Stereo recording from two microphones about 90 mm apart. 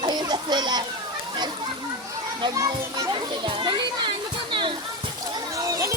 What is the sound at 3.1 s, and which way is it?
Children playing, 65° right (ahead or behind).